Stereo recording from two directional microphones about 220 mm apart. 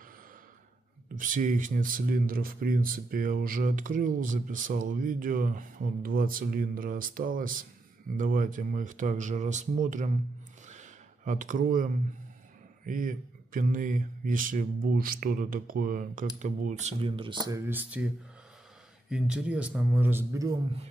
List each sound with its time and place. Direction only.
1.1 s speech: 35° right (ahead or behind)
10.7 s a sound: 35° right (ahead or behind)
12.8 s a man's voice: 35° right (ahead or behind); by 20.5 s 10° right (ahead or behind)